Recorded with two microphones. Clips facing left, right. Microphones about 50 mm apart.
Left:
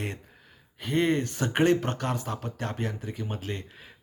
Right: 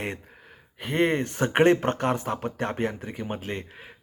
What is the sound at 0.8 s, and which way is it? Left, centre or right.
Speech, right.